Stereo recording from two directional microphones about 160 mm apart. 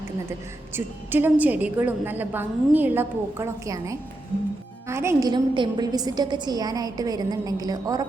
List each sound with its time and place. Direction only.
0.7 s a woman's voice: 15° right (ahead or behind)